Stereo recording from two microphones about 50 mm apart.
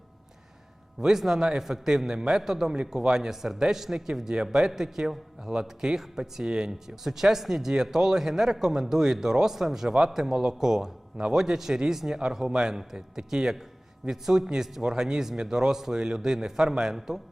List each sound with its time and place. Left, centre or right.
0.9 s a man's voice: centre